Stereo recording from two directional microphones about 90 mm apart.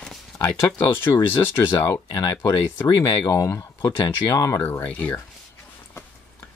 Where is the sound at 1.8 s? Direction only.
40° left (ahead or behind).